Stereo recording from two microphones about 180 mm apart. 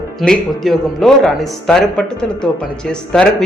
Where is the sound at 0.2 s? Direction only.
Centre (ahead or behind).